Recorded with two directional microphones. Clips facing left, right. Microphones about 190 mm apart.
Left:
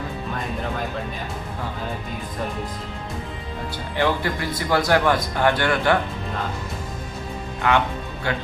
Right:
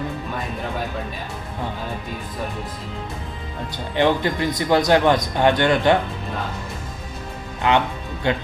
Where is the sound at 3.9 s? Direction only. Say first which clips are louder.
Right 4 dB; 20° right (ahead or behind).